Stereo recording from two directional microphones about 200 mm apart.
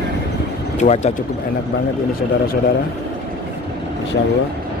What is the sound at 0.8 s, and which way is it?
Speech, 35° left (ahead or behind).